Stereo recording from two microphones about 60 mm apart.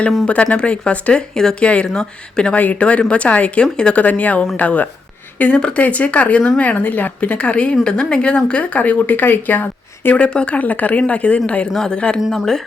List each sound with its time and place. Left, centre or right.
0.3 s a woman's voice: centre
4.0 s a woman's voice: left
10.2 s a woman's voice: centre
12.3 s speech: centre